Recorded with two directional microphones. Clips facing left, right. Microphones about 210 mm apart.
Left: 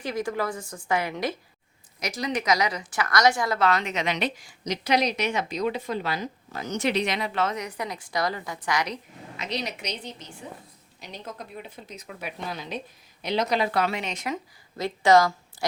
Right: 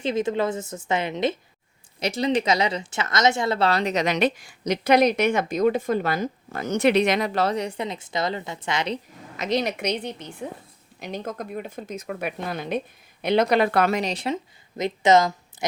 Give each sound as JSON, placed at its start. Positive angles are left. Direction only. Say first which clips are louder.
{"t": 0.0, "sound": "a woman's voice", "louder": "right 5 dB", "side_deg": -25}
{"t": 9.4, "sound": "a woman's voice", "louder": "right 8 dB", "side_deg": -50}
{"t": 14.8, "sound": "a woman's voice", "louder": "right 1 dB", "side_deg": -20}